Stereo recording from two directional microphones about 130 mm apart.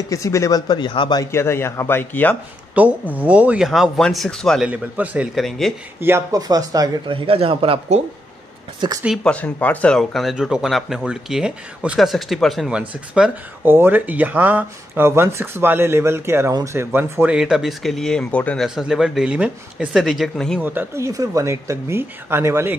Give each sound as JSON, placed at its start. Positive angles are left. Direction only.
{"t": 0.1, "sound": "speech", "side_deg": 25}
{"t": 1.2, "sound": "a man's voice", "side_deg": 20}
{"t": 2.7, "sound": "speech", "side_deg": -10}
{"t": 4.6, "sound": "speech", "side_deg": -10}
{"t": 5.3, "sound": "speech", "side_deg": 0}
{"t": 5.9, "sound": "speech", "side_deg": -20}
{"t": 7.1, "sound": "speech", "side_deg": -45}
{"t": 9.2, "sound": "speech", "side_deg": 10}
{"t": 17.4, "sound": "speech", "side_deg": -5}
{"t": 18.8, "sound": "speech", "side_deg": -5}
{"t": 20.6, "sound": "speech", "side_deg": -20}